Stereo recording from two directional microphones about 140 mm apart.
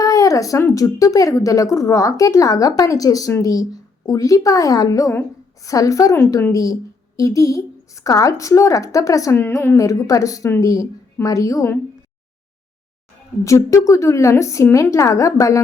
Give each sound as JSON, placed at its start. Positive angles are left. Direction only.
{"t": 0.0, "sound": "a woman's voice", "side_deg": 25}
{"t": 13.4, "sound": "a woman's voice", "side_deg": 20}